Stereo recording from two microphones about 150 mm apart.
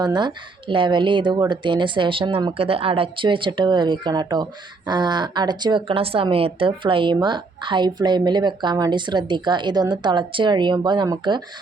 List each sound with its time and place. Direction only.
0.0 s speech: 30° right (ahead or behind)